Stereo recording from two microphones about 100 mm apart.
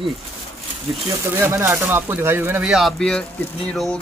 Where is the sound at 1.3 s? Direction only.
25° right (ahead or behind).